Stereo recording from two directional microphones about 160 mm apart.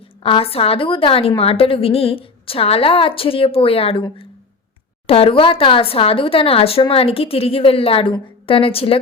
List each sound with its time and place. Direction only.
0.2 s speech: 35° left (ahead or behind)